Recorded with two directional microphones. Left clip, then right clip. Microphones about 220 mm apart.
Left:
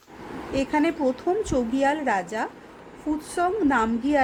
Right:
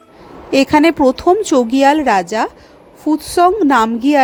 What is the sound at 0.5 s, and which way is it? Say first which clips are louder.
A woman's voice: right 13 dB; 45° right (ahead or behind).